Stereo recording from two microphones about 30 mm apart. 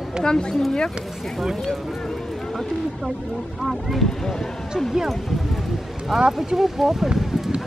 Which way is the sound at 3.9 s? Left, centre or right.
Centre.